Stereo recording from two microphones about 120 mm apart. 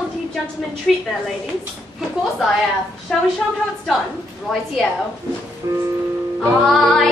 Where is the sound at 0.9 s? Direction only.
Centre (ahead or behind).